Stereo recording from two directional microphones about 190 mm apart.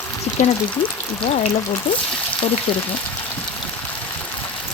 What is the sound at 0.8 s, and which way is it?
Speech, 30° left (ahead or behind).